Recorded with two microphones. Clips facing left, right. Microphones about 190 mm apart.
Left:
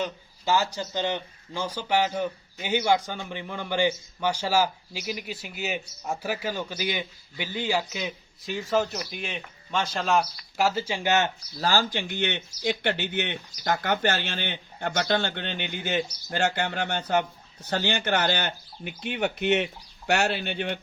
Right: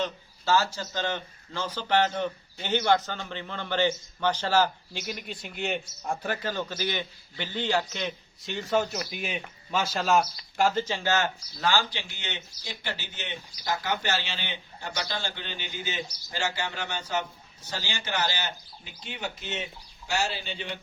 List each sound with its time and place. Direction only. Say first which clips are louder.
0.0 s speech: left 1 dB; 15° left (ahead or behind)
11.6 s speech: left 2 dB; 40° left (ahead or behind); by 20.7 s 60° left (ahead or behind)